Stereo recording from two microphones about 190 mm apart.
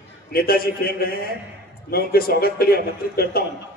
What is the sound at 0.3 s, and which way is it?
A man's voice, 55° left (ahead or behind).